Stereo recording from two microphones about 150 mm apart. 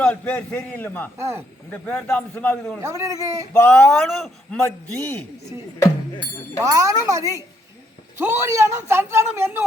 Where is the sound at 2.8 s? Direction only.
20° right (ahead or behind).